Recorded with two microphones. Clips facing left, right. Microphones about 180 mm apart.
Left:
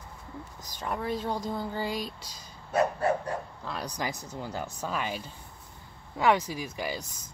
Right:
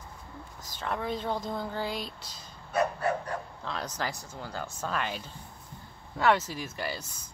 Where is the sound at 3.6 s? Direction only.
10° left (ahead or behind).